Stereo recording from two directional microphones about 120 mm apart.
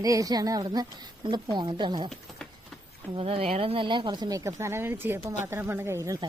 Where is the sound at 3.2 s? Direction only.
55° right (ahead or behind); by 6.2 s 25° right (ahead or behind).